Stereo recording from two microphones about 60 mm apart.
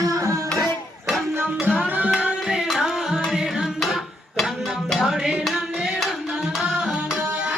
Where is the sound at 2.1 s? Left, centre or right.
Centre.